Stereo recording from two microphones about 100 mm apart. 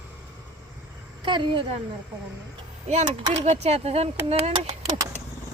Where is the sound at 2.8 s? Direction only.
90° right.